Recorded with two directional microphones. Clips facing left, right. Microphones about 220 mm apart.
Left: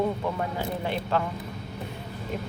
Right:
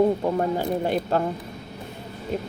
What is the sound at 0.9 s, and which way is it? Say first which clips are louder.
Speech: right 2 dB; 40° right (ahead or behind).